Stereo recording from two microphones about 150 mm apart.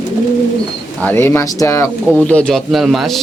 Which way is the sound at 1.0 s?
10° left (ahead or behind).